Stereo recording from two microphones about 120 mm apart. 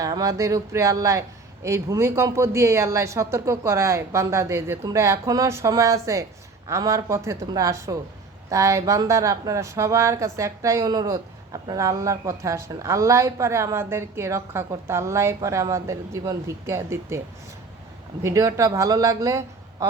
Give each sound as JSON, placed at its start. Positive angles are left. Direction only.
{"t": 0.0, "sound": "speech", "side_deg": -30}
{"t": 18.2, "sound": "speech", "side_deg": -25}